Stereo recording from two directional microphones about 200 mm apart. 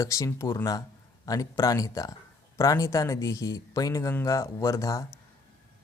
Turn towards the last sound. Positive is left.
turn(degrees=15)  # may be behind; listen again after turning